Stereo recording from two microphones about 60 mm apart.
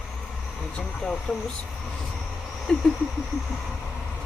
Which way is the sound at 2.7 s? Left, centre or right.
Centre.